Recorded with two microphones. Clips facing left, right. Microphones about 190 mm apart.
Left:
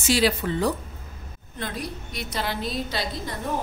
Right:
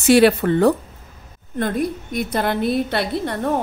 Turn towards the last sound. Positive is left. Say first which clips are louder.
# right 8 dB
turn(degrees=-65)  # may be behind; listen again after turning